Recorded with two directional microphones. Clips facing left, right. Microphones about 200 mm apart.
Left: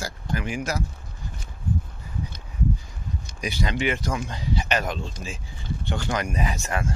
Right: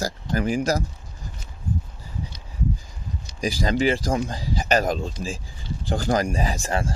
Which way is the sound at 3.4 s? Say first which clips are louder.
Right 5 dB; 35° right (ahead or behind).